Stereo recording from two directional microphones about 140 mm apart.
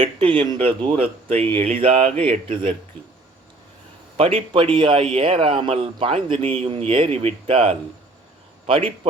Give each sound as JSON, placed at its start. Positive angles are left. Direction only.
{"t": 0.0, "sound": "speech", "side_deg": -40}
{"t": 4.2, "sound": "a man's voice", "side_deg": -40}